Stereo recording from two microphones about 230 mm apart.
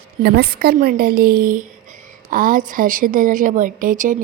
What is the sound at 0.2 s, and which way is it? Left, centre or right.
Speech, right.